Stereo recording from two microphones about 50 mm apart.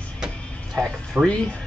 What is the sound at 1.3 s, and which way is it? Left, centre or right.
Speech, left.